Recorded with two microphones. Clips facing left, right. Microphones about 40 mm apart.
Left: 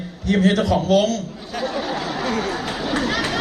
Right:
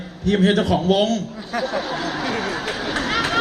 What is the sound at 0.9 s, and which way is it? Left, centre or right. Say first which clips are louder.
Speech: left 1 dB; right.